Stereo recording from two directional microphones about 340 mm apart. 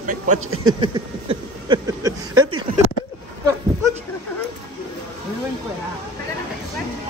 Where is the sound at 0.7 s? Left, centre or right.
Centre.